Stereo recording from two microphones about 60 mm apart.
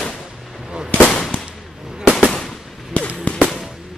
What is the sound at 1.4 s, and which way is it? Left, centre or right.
Firecracker, centre.